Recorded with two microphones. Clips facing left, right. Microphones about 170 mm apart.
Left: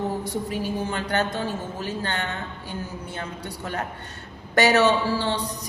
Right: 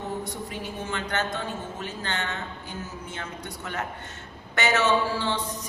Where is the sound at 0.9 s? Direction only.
35° left (ahead or behind).